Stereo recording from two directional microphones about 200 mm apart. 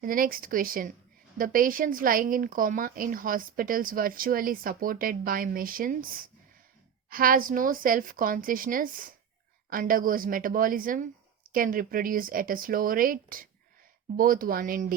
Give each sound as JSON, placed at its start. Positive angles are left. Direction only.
{"t": 0.0, "sound": "speech", "side_deg": -45}